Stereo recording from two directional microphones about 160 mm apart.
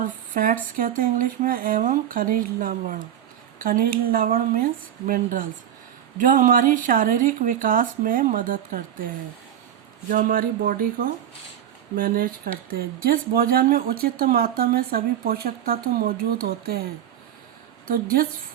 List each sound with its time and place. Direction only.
0.0 s speech: 60° right (ahead or behind)
10.1 s speech: 60° right (ahead or behind)
17.8 s speech: 65° right (ahead or behind)